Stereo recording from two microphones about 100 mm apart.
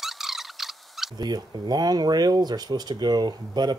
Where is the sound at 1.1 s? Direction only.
45° right (ahead or behind).